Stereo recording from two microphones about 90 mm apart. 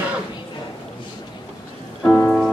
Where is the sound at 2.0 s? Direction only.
20° left (ahead or behind).